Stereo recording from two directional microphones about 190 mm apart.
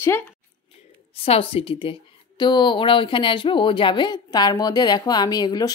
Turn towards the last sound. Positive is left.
turn(degrees=20)  # may be behind; listen again after turning